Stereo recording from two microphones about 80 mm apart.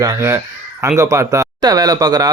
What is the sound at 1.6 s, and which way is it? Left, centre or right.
Speech, right.